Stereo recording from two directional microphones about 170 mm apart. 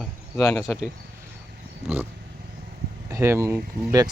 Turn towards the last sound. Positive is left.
turn(degrees=-15)  # may be behind; listen again after turning